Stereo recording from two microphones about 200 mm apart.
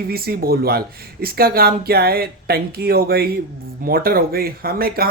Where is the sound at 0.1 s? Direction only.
50° right (ahead or behind).